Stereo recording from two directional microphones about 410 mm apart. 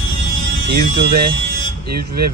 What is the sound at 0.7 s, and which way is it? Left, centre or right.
Speech, right.